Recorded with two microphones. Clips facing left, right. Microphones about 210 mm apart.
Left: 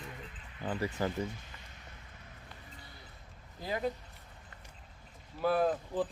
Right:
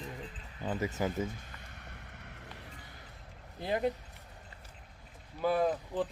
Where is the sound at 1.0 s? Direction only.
15° right (ahead or behind).